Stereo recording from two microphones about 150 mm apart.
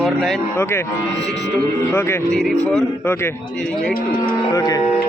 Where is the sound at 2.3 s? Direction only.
5° left (ahead or behind).